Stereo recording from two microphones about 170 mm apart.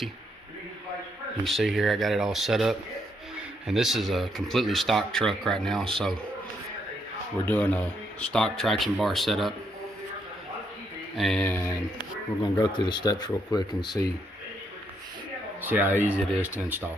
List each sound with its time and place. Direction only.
1.5 s speech: centre (ahead or behind)
7.4 s speech: 10° left (ahead or behind)
11.2 s speech: 5° left (ahead or behind)
11.9 s speech: 25° left (ahead or behind)
15.6 s speech: 10° right (ahead or behind)